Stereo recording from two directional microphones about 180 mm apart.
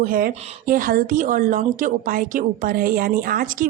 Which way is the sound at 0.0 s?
50° right (ahead or behind).